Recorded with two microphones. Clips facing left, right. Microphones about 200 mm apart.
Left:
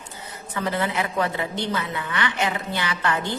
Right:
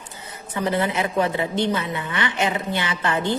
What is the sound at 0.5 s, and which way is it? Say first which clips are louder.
A woman's voice: right 3 dB; 20° right (ahead or behind).